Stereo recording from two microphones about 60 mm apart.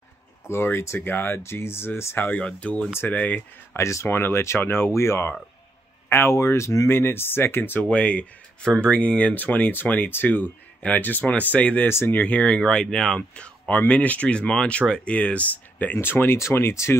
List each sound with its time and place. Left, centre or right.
0.5 s speech: left
0.9 s speech: left
2.2 s speech: left
3.7 s speech: left
6.3 s speech: left
6.9 s speech: left
7.9 s speech: left
11.9 s speech: left
12.2 s speech: left
16.3 s speech: left